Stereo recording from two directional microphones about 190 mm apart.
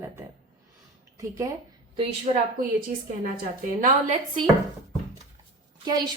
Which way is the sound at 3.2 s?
45° right (ahead or behind).